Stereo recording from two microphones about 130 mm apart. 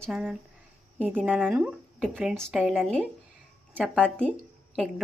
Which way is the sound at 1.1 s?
10° right (ahead or behind).